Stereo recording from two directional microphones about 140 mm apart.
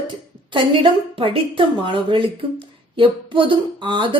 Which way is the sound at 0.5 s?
40° right (ahead or behind).